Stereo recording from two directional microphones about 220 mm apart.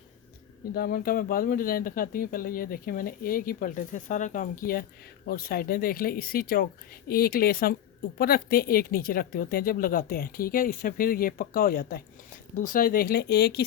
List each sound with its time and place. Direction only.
0.7 s speech: 40° left (ahead or behind)